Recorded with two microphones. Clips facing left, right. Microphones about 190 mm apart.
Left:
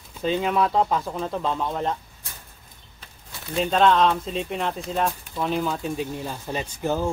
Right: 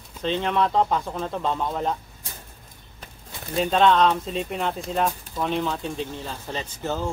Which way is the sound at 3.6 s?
Centre (ahead or behind).